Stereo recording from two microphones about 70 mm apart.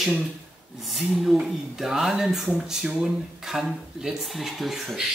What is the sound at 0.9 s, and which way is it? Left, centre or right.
Speech, centre.